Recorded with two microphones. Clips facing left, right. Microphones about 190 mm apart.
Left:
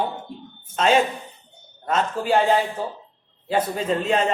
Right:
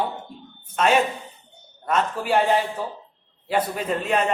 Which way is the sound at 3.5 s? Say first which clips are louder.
Left 1 dB; 30° left (ahead or behind).